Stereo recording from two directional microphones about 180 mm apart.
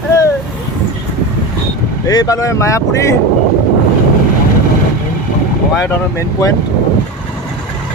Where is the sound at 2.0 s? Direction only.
20° left (ahead or behind).